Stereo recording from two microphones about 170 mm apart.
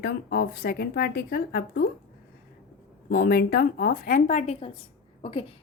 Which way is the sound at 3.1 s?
60° left (ahead or behind).